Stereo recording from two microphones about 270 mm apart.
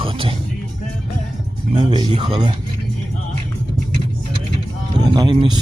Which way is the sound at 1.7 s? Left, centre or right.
Centre.